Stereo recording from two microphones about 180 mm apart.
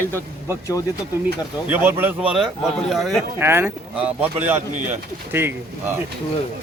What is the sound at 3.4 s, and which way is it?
Speech, 10° right (ahead or behind).